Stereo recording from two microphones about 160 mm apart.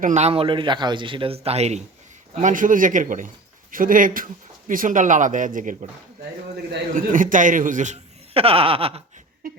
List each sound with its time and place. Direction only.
0.0 s a man's voice: 45° right (ahead or behind)
2.4 s a man's voice: 55° right (ahead or behind)
6.9 s a man's voice: 55° right (ahead or behind)
8.3 s a man's voice: 35° right (ahead or behind)